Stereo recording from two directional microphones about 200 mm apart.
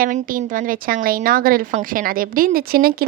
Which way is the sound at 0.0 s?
45° right (ahead or behind).